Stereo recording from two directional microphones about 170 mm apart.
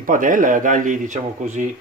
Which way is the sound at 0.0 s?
55° right (ahead or behind).